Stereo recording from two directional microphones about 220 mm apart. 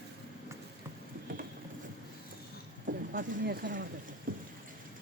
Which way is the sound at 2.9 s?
45° right (ahead or behind).